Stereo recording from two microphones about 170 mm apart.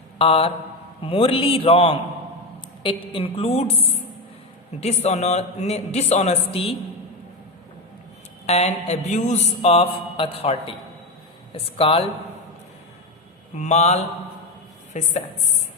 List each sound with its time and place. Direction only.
0.2 s a man's voice: 35° left (ahead or behind)
8.4 s a man's voice: 40° left (ahead or behind)
13.6 s a man's voice: 40° left (ahead or behind)